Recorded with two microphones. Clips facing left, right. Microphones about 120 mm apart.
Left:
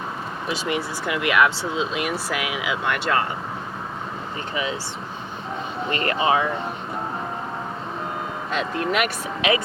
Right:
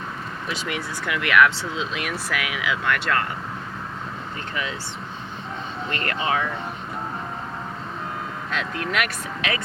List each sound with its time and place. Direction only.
0.4 s speech: 25° left (ahead or behind)
5.9 s speech: 10° left (ahead or behind)
8.4 s speech: 5° left (ahead or behind)